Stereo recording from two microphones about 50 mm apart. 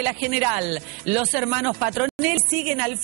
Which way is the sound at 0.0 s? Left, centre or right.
Right.